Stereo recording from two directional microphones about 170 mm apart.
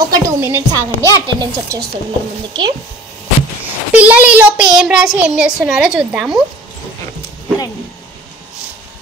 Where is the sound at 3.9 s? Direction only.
10° right (ahead or behind).